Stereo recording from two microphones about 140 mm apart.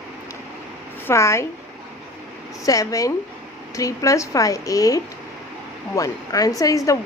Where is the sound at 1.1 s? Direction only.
20° left (ahead or behind).